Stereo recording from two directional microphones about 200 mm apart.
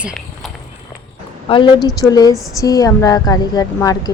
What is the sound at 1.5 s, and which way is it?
A woman's voice, 20° left (ahead or behind).